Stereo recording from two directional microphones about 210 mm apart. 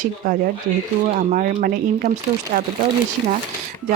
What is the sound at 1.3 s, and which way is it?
Speech, 40° right (ahead or behind).